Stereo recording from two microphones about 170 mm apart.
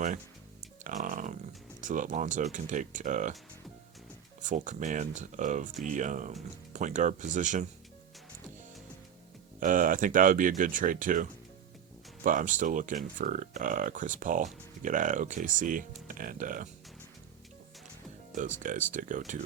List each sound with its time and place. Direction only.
0.9 s a sound: 50° right (ahead or behind)
1.8 s speech: 50° right (ahead or behind)
4.4 s speech: 45° right (ahead or behind)
9.6 s speech: 50° right (ahead or behind)
18.6 s speech: 50° right (ahead or behind)